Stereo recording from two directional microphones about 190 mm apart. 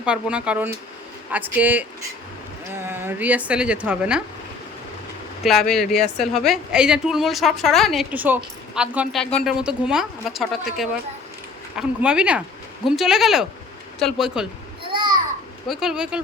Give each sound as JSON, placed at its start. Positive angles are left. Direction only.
{"t": 0.0, "sound": "a woman's voice", "side_deg": -5}
{"t": 5.4, "sound": "a woman's voice", "side_deg": 0}
{"t": 14.9, "sound": "a sound", "side_deg": -20}
{"t": 15.6, "sound": "a woman's voice", "side_deg": 0}